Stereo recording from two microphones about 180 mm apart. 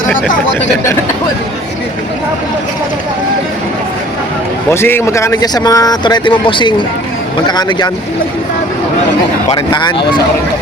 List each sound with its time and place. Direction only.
4.7 s speech: 15° left (ahead or behind)
9.6 s speech: 25° left (ahead or behind)